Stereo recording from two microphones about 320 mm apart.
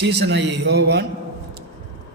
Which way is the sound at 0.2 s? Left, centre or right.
Right.